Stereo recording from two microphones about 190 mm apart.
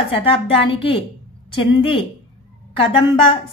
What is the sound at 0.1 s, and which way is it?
A woman's voice, 30° left (ahead or behind).